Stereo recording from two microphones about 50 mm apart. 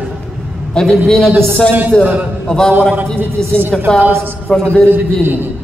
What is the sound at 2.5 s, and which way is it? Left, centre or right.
Speech, centre.